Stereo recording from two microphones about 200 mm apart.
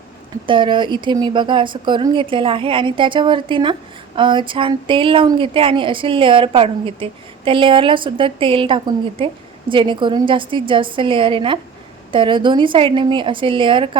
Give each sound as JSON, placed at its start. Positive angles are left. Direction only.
{"t": 0.4, "sound": "speech", "side_deg": -25}